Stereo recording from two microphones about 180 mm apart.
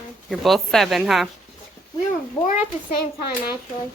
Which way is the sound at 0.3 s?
Centre (ahead or behind).